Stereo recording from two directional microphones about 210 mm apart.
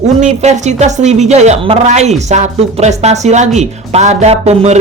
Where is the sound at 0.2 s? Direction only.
35° right (ahead or behind).